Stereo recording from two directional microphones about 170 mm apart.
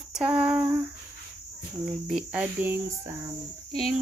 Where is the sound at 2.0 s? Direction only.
5° right (ahead or behind).